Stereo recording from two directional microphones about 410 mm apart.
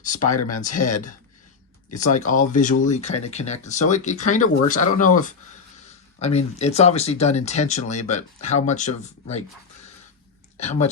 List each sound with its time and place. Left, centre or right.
0.0 s speech: centre
10.6 s speech: centre